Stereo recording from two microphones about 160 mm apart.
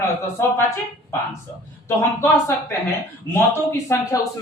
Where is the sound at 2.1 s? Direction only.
15° left (ahead or behind).